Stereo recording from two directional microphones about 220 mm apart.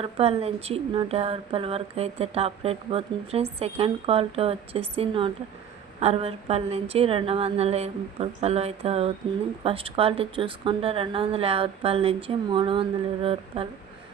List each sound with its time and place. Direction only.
0.0 s a woman's voice: 25° right (ahead or behind)